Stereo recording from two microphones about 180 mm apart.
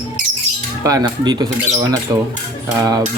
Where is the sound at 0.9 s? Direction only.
20° right (ahead or behind).